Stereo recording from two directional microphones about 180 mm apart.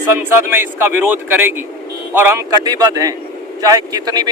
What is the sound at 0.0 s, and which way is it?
Speech, 15° right (ahead or behind).